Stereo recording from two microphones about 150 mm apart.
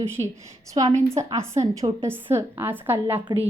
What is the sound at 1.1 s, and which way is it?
A woman's voice, 20° right (ahead or behind).